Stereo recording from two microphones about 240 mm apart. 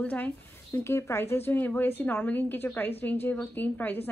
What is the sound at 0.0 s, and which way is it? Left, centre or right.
Speech, centre.